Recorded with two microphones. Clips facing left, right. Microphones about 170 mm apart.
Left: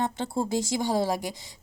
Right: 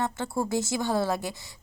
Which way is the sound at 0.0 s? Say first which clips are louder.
Left 1 dB; 20° left (ahead or behind).